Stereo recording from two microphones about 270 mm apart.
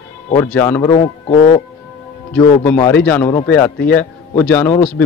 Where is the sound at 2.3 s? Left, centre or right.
Centre.